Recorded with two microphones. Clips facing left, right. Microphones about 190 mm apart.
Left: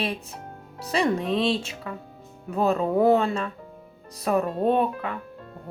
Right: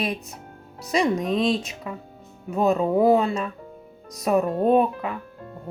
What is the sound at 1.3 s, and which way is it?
Speech, 30° left (ahead or behind).